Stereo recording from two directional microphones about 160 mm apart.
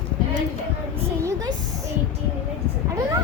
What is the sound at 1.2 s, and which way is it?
Speech, 20° right (ahead or behind).